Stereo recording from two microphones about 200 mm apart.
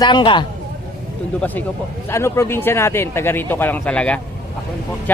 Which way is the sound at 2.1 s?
15° left (ahead or behind).